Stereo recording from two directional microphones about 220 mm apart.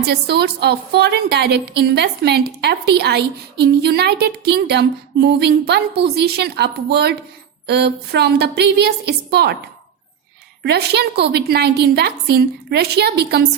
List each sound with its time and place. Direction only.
0.0 s a woman's voice: 50° right (ahead or behind)
10.6 s a woman's voice: 50° right (ahead or behind)